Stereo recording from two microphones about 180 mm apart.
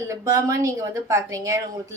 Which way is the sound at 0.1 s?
15° right (ahead or behind).